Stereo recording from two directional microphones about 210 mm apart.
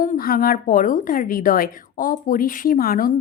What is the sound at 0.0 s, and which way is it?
A woman's voice, 40° left (ahead or behind).